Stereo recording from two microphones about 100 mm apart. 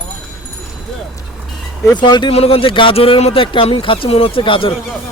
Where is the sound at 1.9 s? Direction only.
50° left (ahead or behind).